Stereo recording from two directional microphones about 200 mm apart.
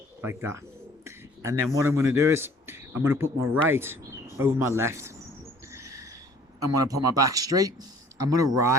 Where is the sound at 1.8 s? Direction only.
15° right (ahead or behind).